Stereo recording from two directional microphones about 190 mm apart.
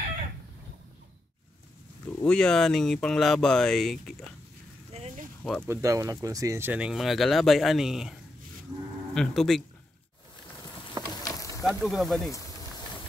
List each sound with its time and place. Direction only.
2.0 s speech: 5° left (ahead or behind)
4.9 s a sound: 35° right (ahead or behind)
5.4 s speech: 5° left (ahead or behind)
5.7 s speech: 15° right (ahead or behind); by 9.6 s centre (ahead or behind)
11.2 s insect: 15° left (ahead or behind)
11.6 s speech: centre (ahead or behind)